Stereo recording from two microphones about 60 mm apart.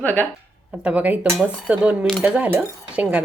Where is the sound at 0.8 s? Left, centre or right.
Right.